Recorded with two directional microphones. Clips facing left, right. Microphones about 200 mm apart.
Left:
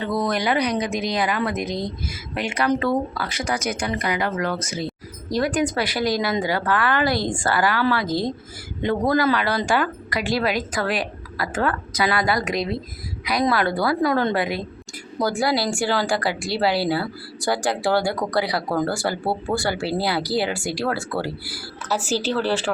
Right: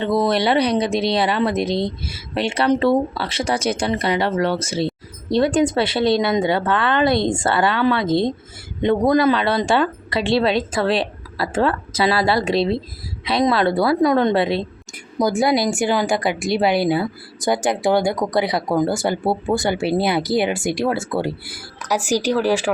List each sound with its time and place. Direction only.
0.0 s speech: 25° right (ahead or behind); by 22.7 s 10° right (ahead or behind)